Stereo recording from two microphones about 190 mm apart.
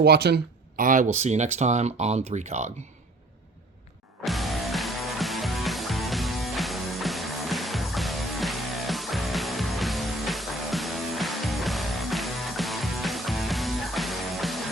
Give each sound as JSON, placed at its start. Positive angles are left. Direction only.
{"t": 0.0, "sound": "speech", "side_deg": -60}
{"t": 0.8, "sound": "speech", "side_deg": -45}
{"t": 4.2, "sound": "music", "side_deg": 0}